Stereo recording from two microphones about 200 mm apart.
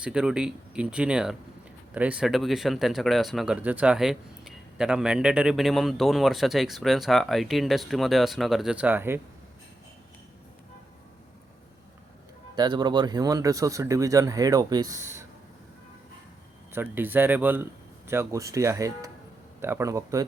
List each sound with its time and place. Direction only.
0.0 s speech: 5° right (ahead or behind)
12.5 s speech: 20° right (ahead or behind)
16.7 s speech: 10° right (ahead or behind)